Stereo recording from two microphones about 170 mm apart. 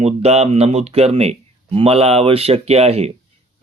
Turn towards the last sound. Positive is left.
turn(degrees=-35)  # may be behind; listen again after turning